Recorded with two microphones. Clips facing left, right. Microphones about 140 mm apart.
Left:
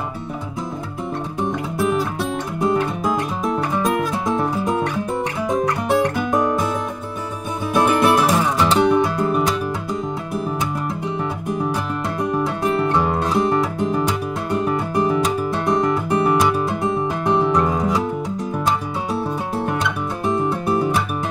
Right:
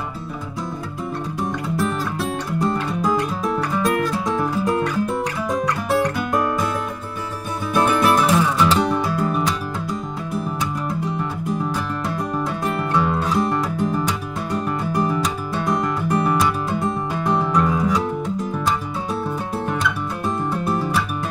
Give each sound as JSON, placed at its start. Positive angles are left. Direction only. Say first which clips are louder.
{"t": 1.8, "sound": "music", "louder": "left 4 dB", "side_deg": 0}
{"t": 2.9, "sound": "music", "louder": "right 1 dB", "side_deg": 20}
{"t": 4.0, "sound": "music", "louder": "left 1 dB", "side_deg": 0}
{"t": 7.8, "sound": "music", "louder": "left 1 dB", "side_deg": 25}
{"t": 8.8, "sound": "music", "louder": "left 4 dB", "side_deg": 0}
{"t": 11.7, "sound": "music", "louder": "left 1 dB", "side_deg": 0}
{"t": 12.9, "sound": "music", "louder": "left 1 dB", "side_deg": 20}
{"t": 13.4, "sound": "music", "louder": "left 2 dB", "side_deg": 0}
{"t": 16.8, "sound": "music", "louder": "left 2 dB", "side_deg": 20}
{"t": 20.2, "sound": "music", "louder": "left 4 dB", "side_deg": 0}